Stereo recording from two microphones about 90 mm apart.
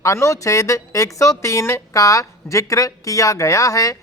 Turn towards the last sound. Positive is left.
turn(degrees=40)  # may be behind; listen again after turning